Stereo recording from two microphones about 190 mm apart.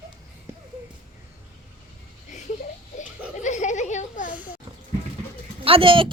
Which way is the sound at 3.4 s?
40° left (ahead or behind).